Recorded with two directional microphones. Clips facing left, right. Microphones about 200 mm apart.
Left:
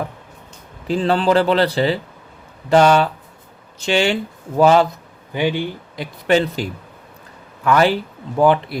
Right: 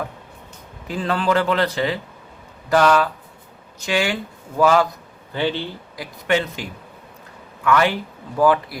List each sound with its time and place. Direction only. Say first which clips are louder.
0.9 s a man's voice: left 5 dB; 30° left (ahead or behind)
5.3 s speech: left 3 dB; 15° left (ahead or behind)
6.0 s a man's voice: left 4 dB; 30° left (ahead or behind)